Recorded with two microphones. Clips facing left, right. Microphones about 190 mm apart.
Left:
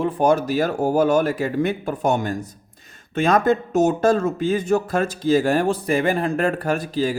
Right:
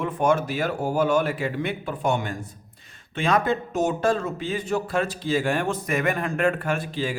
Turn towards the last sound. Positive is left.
turn(degrees=40)  # may be behind; listen again after turning